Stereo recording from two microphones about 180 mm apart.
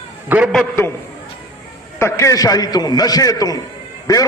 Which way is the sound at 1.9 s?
15° left (ahead or behind).